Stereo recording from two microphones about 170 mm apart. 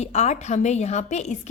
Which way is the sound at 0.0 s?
40° left (ahead or behind).